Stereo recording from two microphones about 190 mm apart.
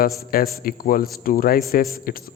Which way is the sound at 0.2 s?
50° left (ahead or behind).